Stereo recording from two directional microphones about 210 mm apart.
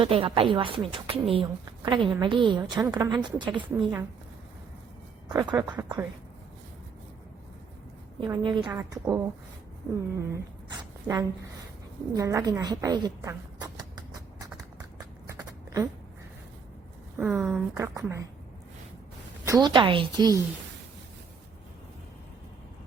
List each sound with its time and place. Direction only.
0.0 s a woman's voice: 25° right (ahead or behind)
5.3 s a woman's voice: 15° right (ahead or behind)
8.2 s a woman's voice: 20° right (ahead or behind)
13.7 s horse: 20° right (ahead or behind)
17.2 s speech: 5° right (ahead or behind)
17.7 s a woman's voice: 15° right (ahead or behind)
19.5 s a woman's voice: 20° right (ahead or behind)